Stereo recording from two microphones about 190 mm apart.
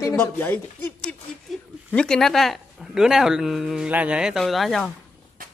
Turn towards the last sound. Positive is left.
turn(degrees=0)  # may be behind; listen again after turning